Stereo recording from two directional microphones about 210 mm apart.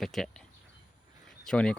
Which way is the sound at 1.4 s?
5° left (ahead or behind).